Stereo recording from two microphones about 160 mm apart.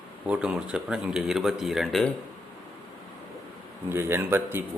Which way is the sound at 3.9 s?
15° right (ahead or behind).